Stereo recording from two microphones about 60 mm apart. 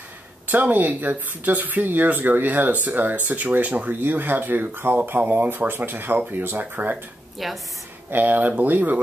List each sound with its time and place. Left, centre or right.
0.5 s speech: right
7.4 s a woman's voice: centre
8.1 s speech: right